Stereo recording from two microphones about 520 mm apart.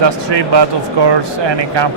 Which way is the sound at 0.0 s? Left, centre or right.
Right.